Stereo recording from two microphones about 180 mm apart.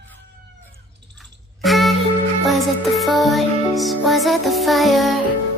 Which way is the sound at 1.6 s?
Centre (ahead or behind).